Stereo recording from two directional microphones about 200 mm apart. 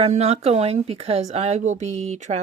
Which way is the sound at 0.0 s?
30° right (ahead or behind).